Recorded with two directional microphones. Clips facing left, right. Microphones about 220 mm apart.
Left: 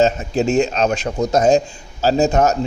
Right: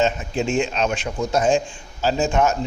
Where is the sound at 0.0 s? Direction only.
40° left (ahead or behind).